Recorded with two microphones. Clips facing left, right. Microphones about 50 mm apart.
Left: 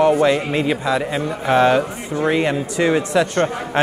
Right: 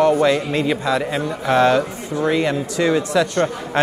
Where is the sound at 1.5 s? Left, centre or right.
Centre.